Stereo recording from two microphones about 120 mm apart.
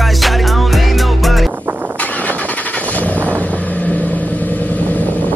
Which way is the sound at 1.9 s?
10° left (ahead or behind).